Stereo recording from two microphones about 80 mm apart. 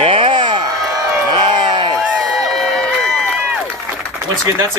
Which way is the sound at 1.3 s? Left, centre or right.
Right.